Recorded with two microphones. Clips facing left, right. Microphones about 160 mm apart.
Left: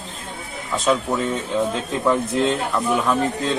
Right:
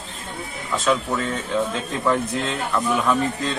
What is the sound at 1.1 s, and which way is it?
Speech, 10° left (ahead or behind).